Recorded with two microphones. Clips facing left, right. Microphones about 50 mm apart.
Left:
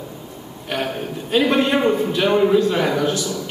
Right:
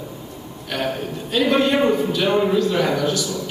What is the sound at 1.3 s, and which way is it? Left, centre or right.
A man's voice, left.